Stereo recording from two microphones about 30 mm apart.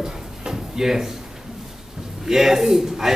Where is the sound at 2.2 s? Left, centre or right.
Centre.